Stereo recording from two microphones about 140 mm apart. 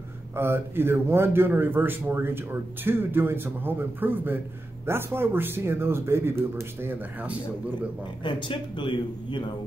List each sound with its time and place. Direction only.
0.4 s a man's voice: 15° right (ahead or behind)
8.2 s speech: 35° left (ahead or behind)